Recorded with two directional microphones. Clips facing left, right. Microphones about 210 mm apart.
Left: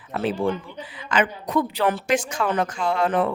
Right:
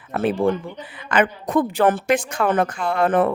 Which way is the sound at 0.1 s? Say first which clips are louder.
Right 4 dB; 50° right (ahead or behind).